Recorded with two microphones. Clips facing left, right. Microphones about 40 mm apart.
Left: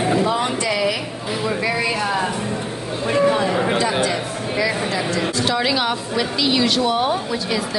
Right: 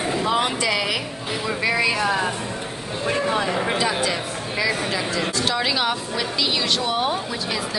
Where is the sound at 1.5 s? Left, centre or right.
Centre.